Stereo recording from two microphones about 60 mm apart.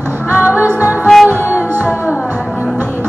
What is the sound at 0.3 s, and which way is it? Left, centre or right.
Music, right.